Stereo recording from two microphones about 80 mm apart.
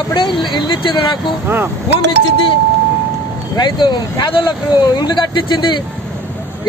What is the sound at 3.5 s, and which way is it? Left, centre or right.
Speech, left.